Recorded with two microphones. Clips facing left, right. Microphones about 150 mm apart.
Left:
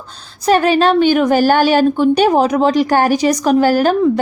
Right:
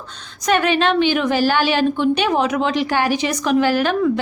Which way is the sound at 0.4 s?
35° left (ahead or behind).